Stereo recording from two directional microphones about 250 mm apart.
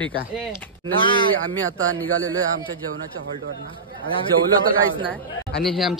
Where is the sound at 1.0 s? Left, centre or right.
Centre.